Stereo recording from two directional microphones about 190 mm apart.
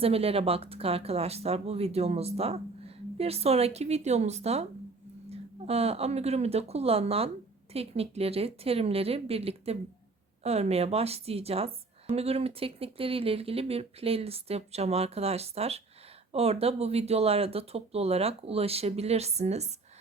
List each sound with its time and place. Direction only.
0.0 s speech: 30° right (ahead or behind)